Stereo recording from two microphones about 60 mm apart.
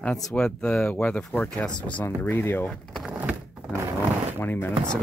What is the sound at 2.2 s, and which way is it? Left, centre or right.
Speech, left.